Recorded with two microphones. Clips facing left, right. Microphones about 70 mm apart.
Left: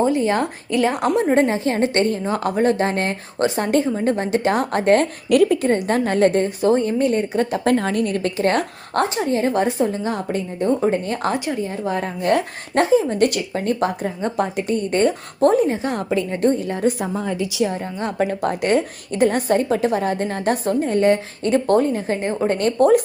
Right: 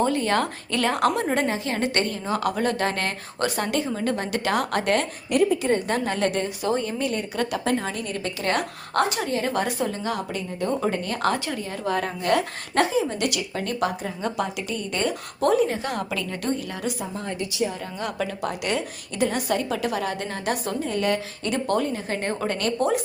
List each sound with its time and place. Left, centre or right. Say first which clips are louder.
0.0 s a woman's voice: left 4 dB; centre
1.5 s speech: left 6 dB; left
5.3 s a woman's voice: left 5 dB; left
5.6 s a woman's voice: left 4 dB; left
7.6 s a woman's voice: left 7 dB; left
22.2 s a woman's voice: left 5 dB; centre
22.4 s speech: left 8 dB; left
22.8 s speech: left 10 dB; left